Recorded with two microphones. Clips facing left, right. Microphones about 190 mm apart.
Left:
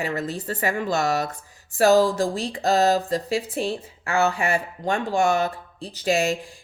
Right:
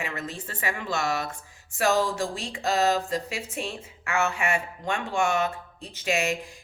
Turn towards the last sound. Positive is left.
turn(degrees=35)  # may be behind; listen again after turning